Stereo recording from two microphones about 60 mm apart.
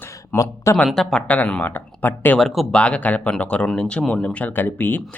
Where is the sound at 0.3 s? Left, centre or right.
Left.